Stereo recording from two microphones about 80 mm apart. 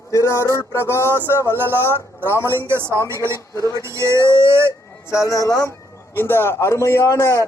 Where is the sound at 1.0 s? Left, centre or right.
Right.